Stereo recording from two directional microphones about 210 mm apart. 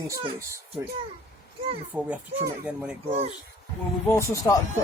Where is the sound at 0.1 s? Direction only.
15° right (ahead or behind).